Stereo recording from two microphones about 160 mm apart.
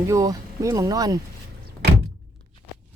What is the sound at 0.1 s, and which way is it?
Speech, 20° right (ahead or behind).